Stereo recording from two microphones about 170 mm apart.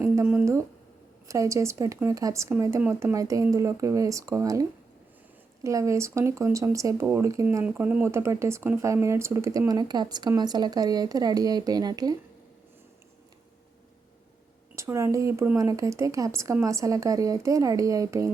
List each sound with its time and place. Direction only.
0.0 s a sound: 15° right (ahead or behind)
1.3 s speech: 20° right (ahead or behind)
5.6 s speech: 20° right (ahead or behind)
14.8 s speech: 15° right (ahead or behind)